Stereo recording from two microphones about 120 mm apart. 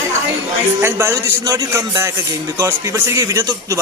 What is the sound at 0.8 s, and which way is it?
Speech, 20° right (ahead or behind).